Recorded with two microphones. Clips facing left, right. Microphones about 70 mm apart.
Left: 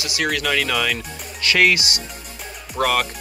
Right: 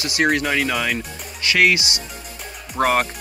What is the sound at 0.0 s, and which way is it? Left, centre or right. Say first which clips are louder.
Speech: right 4 dB; right.